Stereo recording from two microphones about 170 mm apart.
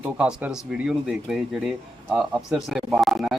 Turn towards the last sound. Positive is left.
turn(degrees=0)  # may be behind; listen again after turning